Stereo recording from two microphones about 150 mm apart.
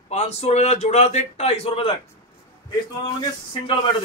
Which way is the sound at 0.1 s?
50° left (ahead or behind).